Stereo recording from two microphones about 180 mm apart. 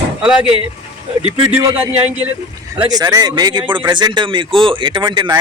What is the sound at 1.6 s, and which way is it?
Speech, 15° right (ahead or behind).